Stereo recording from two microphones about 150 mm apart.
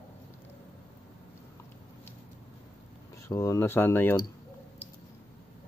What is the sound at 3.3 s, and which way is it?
Speech, 20° left (ahead or behind).